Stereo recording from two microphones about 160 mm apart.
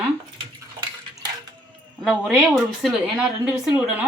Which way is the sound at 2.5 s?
Centre (ahead or behind).